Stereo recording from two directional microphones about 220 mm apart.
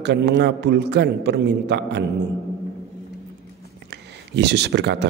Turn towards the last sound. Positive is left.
turn(degrees=-50)  # may be behind; listen again after turning